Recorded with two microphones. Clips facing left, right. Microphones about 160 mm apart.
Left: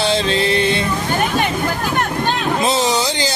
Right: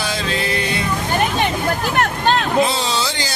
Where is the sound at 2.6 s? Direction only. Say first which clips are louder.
Left 4 dB; 20° left (ahead or behind).